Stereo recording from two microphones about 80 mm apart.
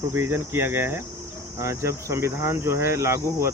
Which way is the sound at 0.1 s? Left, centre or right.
Right.